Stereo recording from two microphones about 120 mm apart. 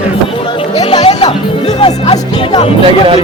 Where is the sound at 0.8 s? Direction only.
60° left (ahead or behind).